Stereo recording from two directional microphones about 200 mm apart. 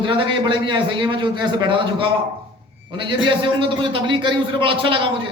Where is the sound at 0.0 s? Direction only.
25° right (ahead or behind).